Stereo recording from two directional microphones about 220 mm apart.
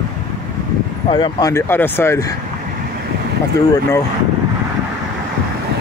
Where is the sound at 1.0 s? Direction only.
20° left (ahead or behind).